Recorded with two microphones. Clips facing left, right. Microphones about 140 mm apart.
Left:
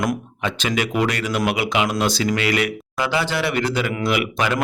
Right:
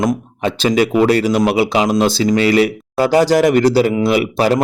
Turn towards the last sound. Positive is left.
turn(degrees=-35)  # may be behind; listen again after turning